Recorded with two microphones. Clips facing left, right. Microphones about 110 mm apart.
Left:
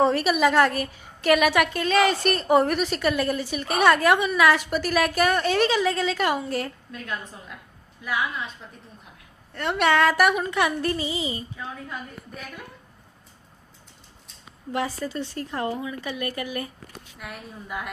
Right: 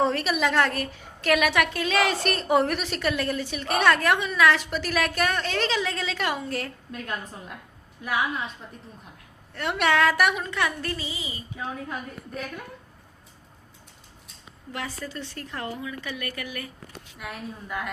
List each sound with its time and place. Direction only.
0.0 s a woman's voice: 5° left (ahead or behind)
9.6 s a woman's voice: centre (ahead or behind)
10.5 s a woman's voice: 15° left (ahead or behind)
14.7 s a woman's voice: 25° left (ahead or behind)